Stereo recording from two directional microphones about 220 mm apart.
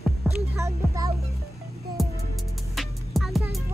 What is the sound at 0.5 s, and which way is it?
Music, 15° right (ahead or behind).